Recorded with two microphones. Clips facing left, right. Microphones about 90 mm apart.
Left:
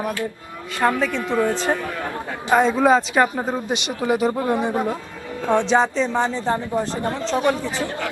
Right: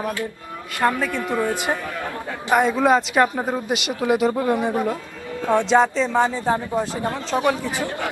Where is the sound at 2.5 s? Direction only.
5° right (ahead or behind).